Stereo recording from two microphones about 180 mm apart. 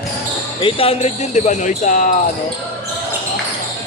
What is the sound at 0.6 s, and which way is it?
Speech, 30° left (ahead or behind).